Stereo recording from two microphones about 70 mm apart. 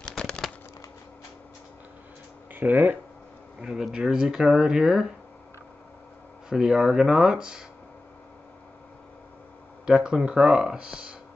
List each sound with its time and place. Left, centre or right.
0.2 s a sound: centre
2.5 s speech: right
3.6 s speech: centre
6.5 s speech: centre
9.8 s speech: centre